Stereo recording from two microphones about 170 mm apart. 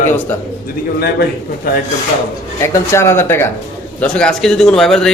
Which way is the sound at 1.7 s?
60° left (ahead or behind).